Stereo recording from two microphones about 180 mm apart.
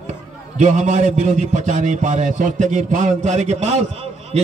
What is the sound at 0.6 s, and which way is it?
A man's voice, 40° right (ahead or behind).